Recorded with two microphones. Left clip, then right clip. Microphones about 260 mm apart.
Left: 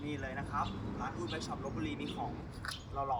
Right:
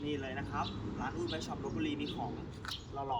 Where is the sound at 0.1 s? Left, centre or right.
Centre.